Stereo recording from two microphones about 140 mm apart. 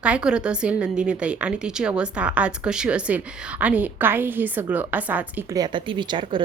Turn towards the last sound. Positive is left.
turn(degrees=-35)  # may be behind; listen again after turning